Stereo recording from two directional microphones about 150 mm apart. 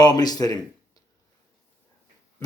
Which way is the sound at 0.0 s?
25° left (ahead or behind).